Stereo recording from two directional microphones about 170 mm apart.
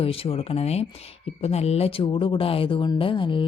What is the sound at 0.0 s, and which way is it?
A woman's voice, 35° left (ahead or behind).